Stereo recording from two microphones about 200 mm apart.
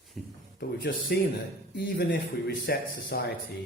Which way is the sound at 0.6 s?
50° left (ahead or behind).